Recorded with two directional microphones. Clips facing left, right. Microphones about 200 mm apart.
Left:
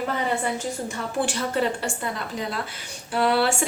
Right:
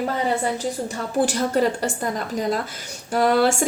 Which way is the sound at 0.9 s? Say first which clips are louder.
Right 6 dB; 40° right (ahead or behind).